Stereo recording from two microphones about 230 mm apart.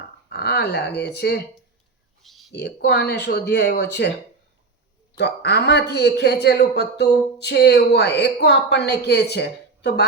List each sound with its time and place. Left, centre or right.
0.3 s a man's voice: left
2.2 s a sound: centre
2.5 s a man's voice: left
5.1 s a man's voice: left